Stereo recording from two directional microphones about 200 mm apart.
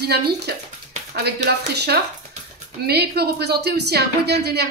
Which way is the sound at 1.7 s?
55° right (ahead or behind).